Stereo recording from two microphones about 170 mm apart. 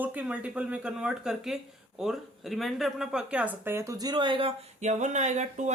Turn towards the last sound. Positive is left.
turn(degrees=-45)  # may be behind; listen again after turning